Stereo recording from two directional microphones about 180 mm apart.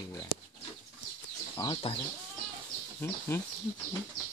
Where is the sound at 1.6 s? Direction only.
25° left (ahead or behind).